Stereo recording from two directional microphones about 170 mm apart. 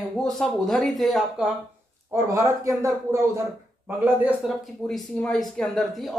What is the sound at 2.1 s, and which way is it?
Speech, 20° right (ahead or behind).